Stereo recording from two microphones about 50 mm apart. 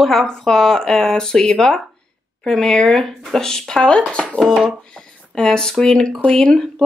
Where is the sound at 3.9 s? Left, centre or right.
Left.